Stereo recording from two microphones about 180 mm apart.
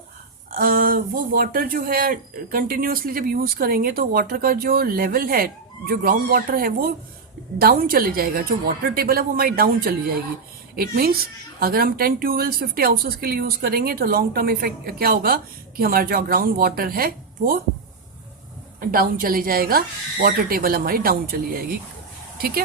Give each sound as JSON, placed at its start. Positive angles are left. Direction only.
{"t": 0.5, "sound": "a woman's voice", "side_deg": -50}
{"t": 18.8, "sound": "a woman's voice", "side_deg": -50}
{"t": 22.4, "sound": "speech", "side_deg": -55}